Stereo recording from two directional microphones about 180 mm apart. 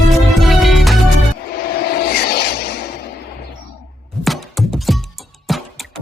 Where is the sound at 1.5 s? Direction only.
60° left (ahead or behind).